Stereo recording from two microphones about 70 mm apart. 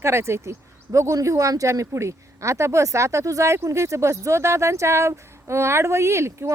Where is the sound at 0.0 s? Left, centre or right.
Right.